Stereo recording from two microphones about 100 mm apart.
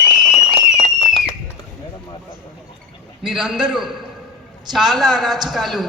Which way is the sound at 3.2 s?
5° right (ahead or behind).